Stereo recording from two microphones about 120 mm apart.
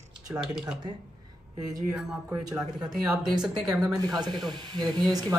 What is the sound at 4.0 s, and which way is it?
Speech, 35° right (ahead or behind).